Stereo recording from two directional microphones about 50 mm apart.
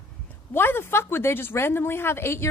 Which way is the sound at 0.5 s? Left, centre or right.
Left.